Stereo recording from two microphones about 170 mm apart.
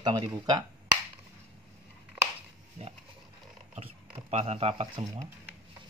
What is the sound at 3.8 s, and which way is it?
Speech, 35° right (ahead or behind).